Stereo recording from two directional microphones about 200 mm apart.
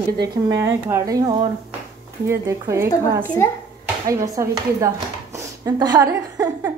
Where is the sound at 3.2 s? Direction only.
15° left (ahead or behind).